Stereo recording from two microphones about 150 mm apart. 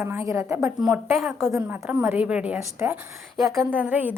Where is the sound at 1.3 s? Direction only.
15° right (ahead or behind).